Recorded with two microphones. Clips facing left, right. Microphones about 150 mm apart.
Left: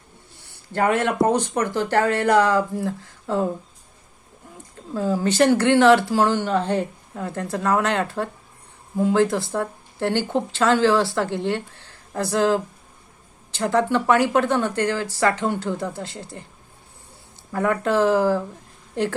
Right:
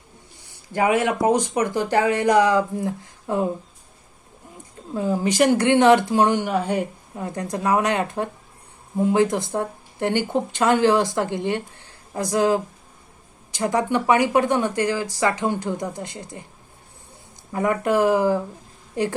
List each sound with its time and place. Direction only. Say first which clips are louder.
0.7 s speech: right 1 dB; 10° right (ahead or behind)
4.9 s speech: even; 15° right (ahead or behind)
17.5 s speech: even; 15° right (ahead or behind)